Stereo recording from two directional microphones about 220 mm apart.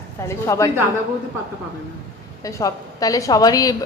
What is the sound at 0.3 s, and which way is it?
Speech, 15° left (ahead or behind).